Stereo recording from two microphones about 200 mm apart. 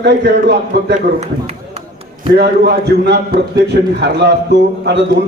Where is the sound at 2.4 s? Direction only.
55° right (ahead or behind).